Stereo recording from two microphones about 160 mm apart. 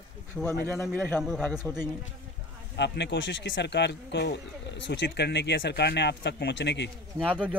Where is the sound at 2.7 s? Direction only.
90° left.